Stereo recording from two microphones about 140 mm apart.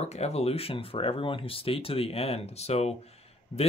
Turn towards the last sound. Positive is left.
turn(degrees=45)  # may be behind; listen again after turning